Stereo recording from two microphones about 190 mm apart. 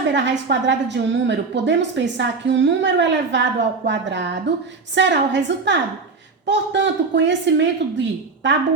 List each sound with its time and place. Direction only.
0.1 s a woman's voice: 65° right (ahead or behind)